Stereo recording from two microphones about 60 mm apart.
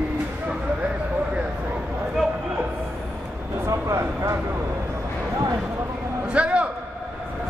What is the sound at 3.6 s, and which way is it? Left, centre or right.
Vehicle, right.